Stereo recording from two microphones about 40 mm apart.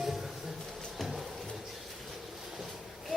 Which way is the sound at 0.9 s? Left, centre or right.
Centre.